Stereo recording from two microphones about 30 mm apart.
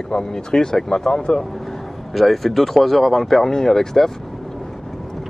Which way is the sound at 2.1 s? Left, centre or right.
Centre.